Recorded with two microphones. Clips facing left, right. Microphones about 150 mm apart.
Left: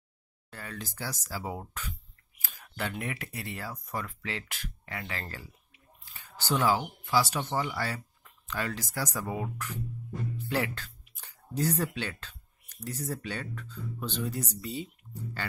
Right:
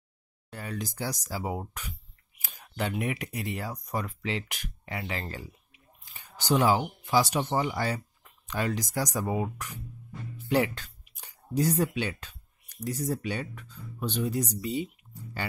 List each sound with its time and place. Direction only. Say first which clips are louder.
0.5 s speech: right 5 dB; 15° right (ahead or behind)